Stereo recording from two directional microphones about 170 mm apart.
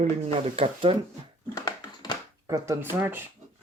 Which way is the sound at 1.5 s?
20° left (ahead or behind).